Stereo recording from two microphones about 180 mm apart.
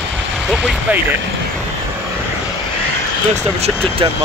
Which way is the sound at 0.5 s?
Centre (ahead or behind).